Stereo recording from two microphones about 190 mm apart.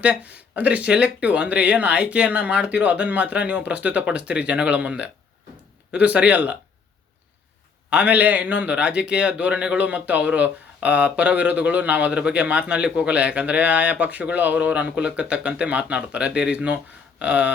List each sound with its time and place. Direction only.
0.0 s a man's voice: 5° right (ahead or behind)
7.9 s a man's voice: 5° right (ahead or behind)